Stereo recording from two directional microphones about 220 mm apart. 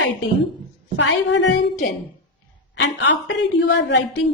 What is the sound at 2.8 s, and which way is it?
A woman's voice, 55° left (ahead or behind).